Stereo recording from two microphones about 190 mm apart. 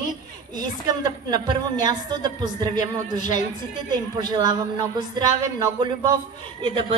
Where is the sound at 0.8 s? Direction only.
20° right (ahead or behind).